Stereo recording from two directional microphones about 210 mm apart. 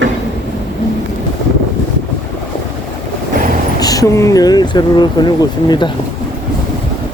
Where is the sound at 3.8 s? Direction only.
15° left (ahead or behind).